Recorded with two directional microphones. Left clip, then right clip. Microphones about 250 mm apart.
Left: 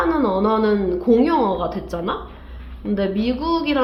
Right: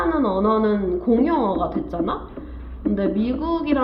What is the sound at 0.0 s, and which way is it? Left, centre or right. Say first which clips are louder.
A woman's voice: left 2 dB; left.